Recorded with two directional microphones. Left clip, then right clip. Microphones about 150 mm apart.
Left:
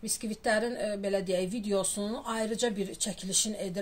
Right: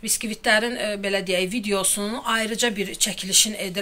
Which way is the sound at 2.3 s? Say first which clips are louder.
Right 9 dB; 55° left (ahead or behind).